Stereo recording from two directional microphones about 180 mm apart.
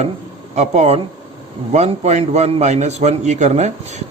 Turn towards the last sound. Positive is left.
turn(degrees=-40)  # may be behind; listen again after turning